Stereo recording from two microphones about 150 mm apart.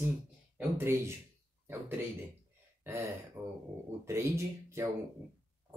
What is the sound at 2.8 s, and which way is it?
Speech, 15° right (ahead or behind).